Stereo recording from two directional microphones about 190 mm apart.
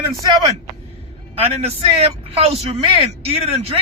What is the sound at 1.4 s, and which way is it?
A man's voice, 35° right (ahead or behind).